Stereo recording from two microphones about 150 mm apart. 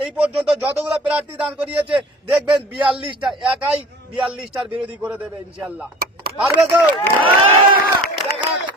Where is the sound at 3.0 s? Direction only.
35° right (ahead or behind).